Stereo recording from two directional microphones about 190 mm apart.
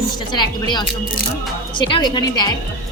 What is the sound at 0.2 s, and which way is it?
A woman's voice, 25° left (ahead or behind).